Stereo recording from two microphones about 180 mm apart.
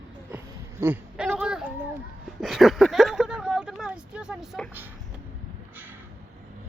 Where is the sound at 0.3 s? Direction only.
10° right (ahead or behind).